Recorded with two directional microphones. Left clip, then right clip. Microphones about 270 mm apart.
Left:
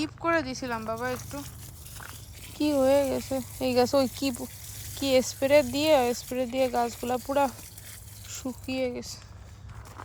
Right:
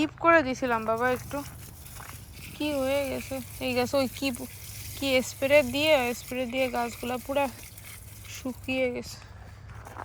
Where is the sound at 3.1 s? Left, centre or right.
Centre.